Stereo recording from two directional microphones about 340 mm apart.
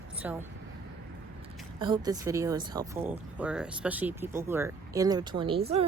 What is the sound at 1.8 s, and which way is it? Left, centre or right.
Speech, centre.